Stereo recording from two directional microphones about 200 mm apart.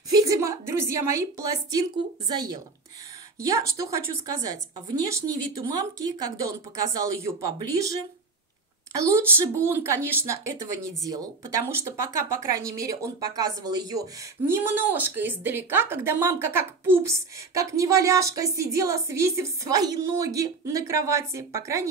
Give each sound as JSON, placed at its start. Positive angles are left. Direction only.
{"t": 0.1, "sound": "a woman's voice", "side_deg": -15}
{"t": 9.0, "sound": "speech", "side_deg": -15}